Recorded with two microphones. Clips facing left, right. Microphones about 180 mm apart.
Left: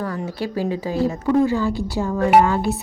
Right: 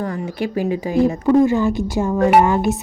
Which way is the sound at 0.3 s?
15° right (ahead or behind).